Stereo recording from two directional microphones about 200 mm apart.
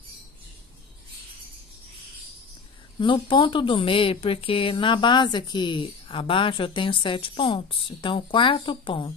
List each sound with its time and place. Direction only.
3.0 s a woman's voice: 25° left (ahead or behind)